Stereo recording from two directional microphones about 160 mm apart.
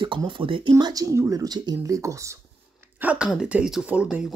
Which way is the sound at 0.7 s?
20° right (ahead or behind).